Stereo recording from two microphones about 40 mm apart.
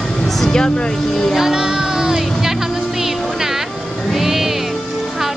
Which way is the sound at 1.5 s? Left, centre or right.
Centre.